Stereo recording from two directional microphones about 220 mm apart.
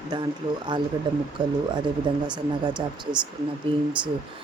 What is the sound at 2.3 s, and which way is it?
Speech, 20° right (ahead or behind).